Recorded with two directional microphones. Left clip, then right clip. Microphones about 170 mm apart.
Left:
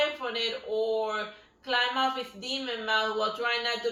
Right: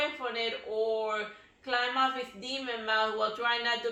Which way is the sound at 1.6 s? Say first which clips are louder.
Left 2 dB; 15° right (ahead or behind).